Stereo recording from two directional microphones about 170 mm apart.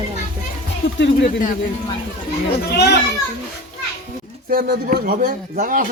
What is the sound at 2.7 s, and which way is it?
Speech, 75° left (ahead or behind).